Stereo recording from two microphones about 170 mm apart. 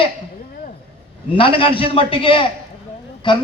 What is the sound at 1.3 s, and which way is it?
A man's voice, 30° left (ahead or behind).